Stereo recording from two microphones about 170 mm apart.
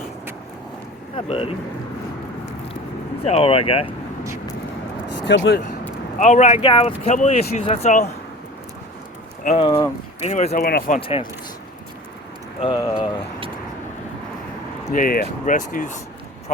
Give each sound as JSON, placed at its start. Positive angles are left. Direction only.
{"t": 1.1, "sound": "speech", "side_deg": 35}
{"t": 3.2, "sound": "speech", "side_deg": 35}
{"t": 5.2, "sound": "speech", "side_deg": 80}
{"t": 6.1, "sound": "speech", "side_deg": 45}
{"t": 6.7, "sound": "speech", "side_deg": 35}
{"t": 9.6, "sound": "speech", "side_deg": 35}
{"t": 10.5, "sound": "speech", "side_deg": 65}
{"t": 11.0, "sound": "speech", "side_deg": 30}
{"t": 12.6, "sound": "speech", "side_deg": 25}
{"t": 14.8, "sound": "speech", "side_deg": 55}